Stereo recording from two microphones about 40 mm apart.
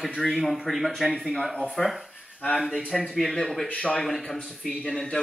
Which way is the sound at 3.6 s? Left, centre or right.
Left.